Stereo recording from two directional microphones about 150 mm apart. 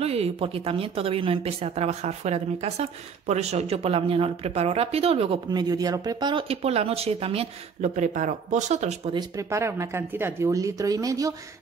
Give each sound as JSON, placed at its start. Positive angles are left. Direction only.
{"t": 0.0, "sound": "speech", "side_deg": -40}
{"t": 9.4, "sound": "speech", "side_deg": -20}